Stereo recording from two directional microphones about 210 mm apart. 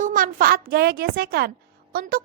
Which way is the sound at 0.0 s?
40° right (ahead or behind).